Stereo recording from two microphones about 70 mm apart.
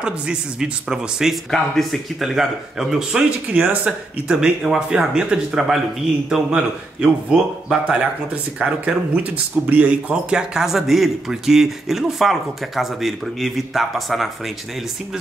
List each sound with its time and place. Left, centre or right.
0.0 s speech: centre
1.5 s speech: centre; by 10.4 s right
10.5 s speech: centre